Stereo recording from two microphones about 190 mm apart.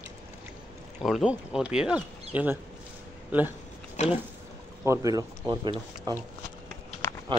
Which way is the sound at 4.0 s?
40° left (ahead or behind).